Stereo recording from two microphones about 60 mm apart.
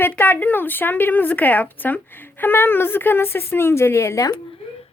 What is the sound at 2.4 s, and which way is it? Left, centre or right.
A woman's voice, left.